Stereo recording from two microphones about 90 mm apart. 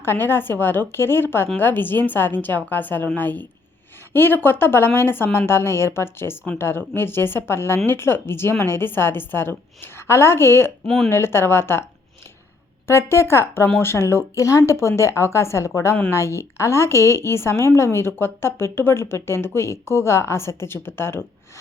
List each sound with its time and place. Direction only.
0.0 s a woman's voice: 25° left (ahead or behind)
10.8 s speech: 5° left (ahead or behind)
11.1 s a woman's voice: 30° left (ahead or behind)
12.9 s a woman's voice: 30° left (ahead or behind)